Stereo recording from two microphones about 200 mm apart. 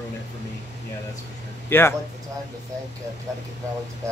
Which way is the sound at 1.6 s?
10° left (ahead or behind).